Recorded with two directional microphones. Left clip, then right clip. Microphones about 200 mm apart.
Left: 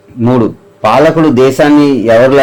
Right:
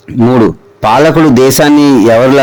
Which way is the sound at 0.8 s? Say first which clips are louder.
Right 1 dB; 50° right (ahead or behind).